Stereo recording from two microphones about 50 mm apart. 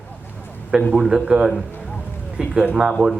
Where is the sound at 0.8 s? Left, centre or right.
Left.